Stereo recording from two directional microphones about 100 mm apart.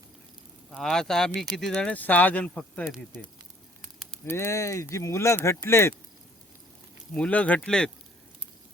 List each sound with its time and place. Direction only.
0.7 s speech: 5° left (ahead or behind); by 5.9 s 25° left (ahead or behind)
7.1 s speech: 15° left (ahead or behind)